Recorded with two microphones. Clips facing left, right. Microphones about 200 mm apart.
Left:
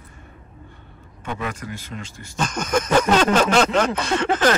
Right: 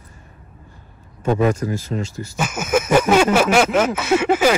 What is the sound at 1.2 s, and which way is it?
Speech, 40° right (ahead or behind).